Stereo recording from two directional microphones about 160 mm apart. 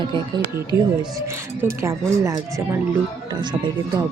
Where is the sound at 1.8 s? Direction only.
20° right (ahead or behind).